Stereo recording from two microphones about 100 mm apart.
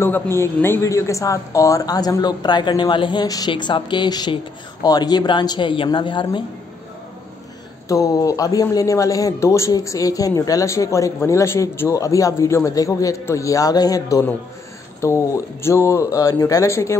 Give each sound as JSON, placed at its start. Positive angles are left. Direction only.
{"t": 0.0, "sound": "a woman's voice", "side_deg": 25}
{"t": 7.9, "sound": "speech", "side_deg": 35}